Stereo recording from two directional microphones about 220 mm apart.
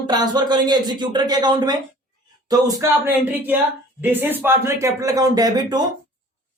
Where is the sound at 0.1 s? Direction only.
20° right (ahead or behind).